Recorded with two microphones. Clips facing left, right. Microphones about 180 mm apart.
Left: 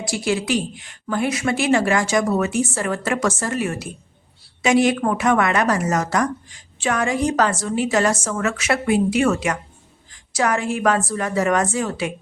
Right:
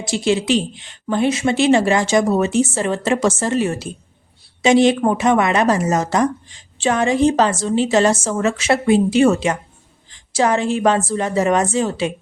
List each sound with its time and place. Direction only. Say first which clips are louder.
0.0 s a woman's voice: right 4 dB; 25° right (ahead or behind)